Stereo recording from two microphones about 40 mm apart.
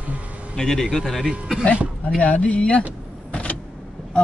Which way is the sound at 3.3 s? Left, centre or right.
Left.